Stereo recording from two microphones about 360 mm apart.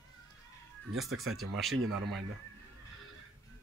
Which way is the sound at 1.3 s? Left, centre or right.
Centre.